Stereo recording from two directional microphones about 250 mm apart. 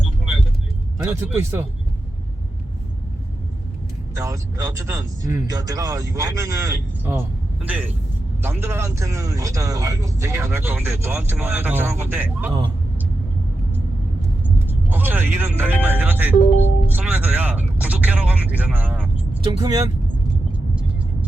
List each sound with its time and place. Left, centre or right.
1.0 s speech: centre
4.1 s speech: centre
14.7 s speech: centre
19.5 s speech: centre